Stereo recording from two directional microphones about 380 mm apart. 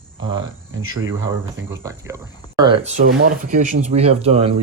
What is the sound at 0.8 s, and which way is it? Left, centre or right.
Speech, right.